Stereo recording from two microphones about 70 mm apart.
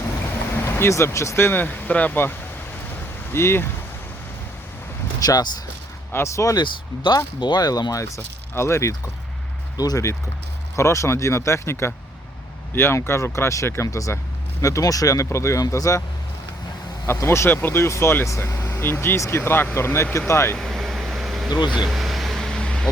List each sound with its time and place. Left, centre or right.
0.5 s speech: left
1.5 s speech: left
3.3 s speech: left
5.2 s speech: left
6.1 s speech: left
6.6 s speech: left
8.0 s speech: left
9.7 s speech: left
10.8 s speech: left
15.6 s speech: left
17.1 s speech: left
20.6 s air conditioning: centre
21.8 s vehicle: centre